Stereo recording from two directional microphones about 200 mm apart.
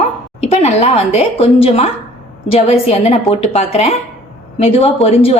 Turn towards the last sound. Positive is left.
turn(degrees=30)  # may be behind; listen again after turning